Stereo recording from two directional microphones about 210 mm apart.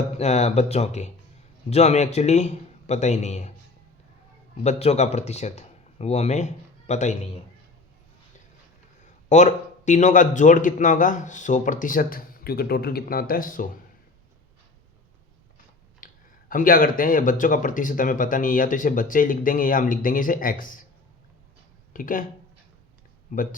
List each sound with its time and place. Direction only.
0.2 s speech: 30° left (ahead or behind)
4.6 s speech: 30° left (ahead or behind)
9.3 s speech: 35° left (ahead or behind)
16.0 s a sound: 40° left (ahead or behind)
16.5 s speech: 40° left (ahead or behind)
21.9 s speech: 40° left (ahead or behind)
23.3 s speech: 40° left (ahead or behind)